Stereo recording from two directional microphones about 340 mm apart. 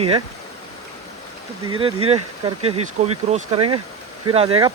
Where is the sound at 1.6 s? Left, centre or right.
Centre.